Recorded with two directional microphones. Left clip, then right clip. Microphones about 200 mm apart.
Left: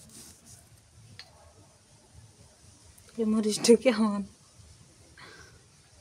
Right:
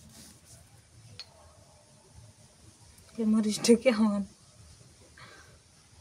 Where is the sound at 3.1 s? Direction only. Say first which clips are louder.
Left 2 dB; 25° left (ahead or behind).